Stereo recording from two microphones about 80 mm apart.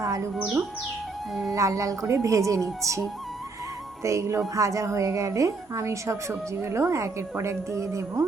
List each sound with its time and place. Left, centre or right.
0.0 s speech: right
1.5 s a woman's voice: right
4.0 s a woman's voice: right